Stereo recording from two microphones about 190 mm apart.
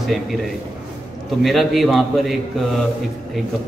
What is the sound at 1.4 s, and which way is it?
A man's voice, centre (ahead or behind).